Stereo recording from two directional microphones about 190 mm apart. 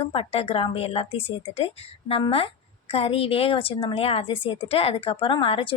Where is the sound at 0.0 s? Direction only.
30° left (ahead or behind).